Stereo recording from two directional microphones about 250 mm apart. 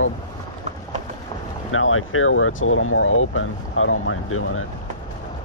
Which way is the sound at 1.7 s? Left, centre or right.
Left.